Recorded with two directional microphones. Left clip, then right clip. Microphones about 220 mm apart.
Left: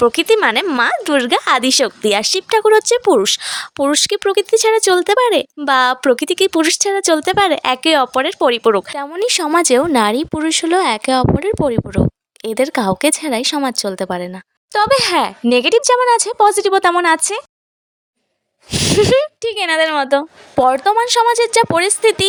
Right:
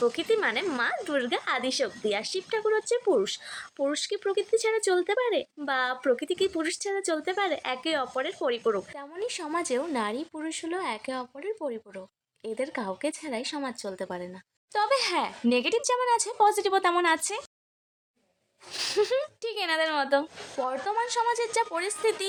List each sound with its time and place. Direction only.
0.0 s speech: 50° left (ahead or behind); by 17.4 s 35° left (ahead or behind)
18.7 s speech: 30° left (ahead or behind)